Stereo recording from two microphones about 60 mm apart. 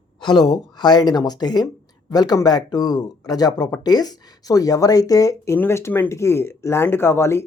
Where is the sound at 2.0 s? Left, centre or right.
Left.